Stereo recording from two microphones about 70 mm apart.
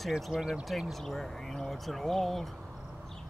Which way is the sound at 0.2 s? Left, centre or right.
Centre.